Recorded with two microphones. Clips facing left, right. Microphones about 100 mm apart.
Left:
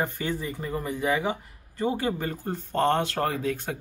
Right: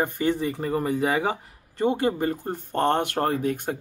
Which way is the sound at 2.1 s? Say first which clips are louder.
Right 4 dB; 35° right (ahead or behind).